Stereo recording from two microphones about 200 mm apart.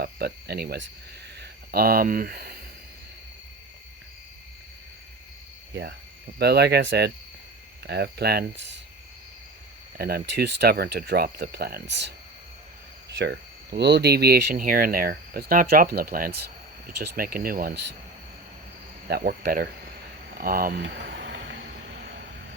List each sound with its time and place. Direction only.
0.0 s speech: 55° right (ahead or behind)
6.4 s speech: 55° right (ahead or behind)
10.0 s speech: 50° right (ahead or behind)
13.1 s speech: 55° right (ahead or behind)
19.0 s speech: 50° right (ahead or behind)
20.8 s vehicle: 65° right (ahead or behind)